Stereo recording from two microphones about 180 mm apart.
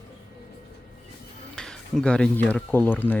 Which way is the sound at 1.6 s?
5° left (ahead or behind).